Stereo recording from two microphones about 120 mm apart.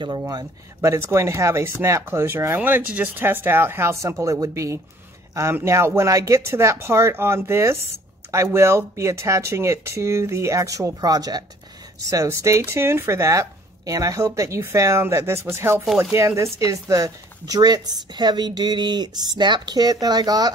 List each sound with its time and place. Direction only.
0.3 s speech: 30° right (ahead or behind)